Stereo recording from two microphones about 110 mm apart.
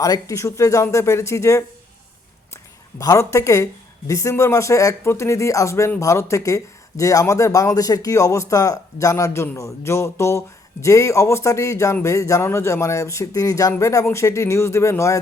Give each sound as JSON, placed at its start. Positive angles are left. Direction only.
{"t": 0.0, "sound": "speech", "side_deg": 30}
{"t": 3.0, "sound": "speech", "side_deg": 30}